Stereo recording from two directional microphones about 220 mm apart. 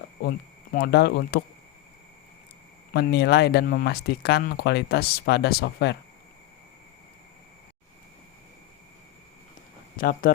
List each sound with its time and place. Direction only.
0.3 s speech: 40° left (ahead or behind)
2.9 s speech: 50° left (ahead or behind)
10.0 s speech: 40° left (ahead or behind)